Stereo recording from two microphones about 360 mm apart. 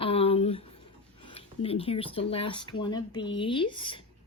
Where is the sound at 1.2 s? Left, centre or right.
Centre.